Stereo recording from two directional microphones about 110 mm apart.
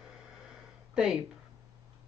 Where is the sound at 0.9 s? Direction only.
5° right (ahead or behind).